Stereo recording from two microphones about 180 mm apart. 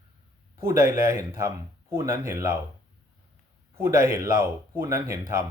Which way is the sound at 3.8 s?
15° right (ahead or behind).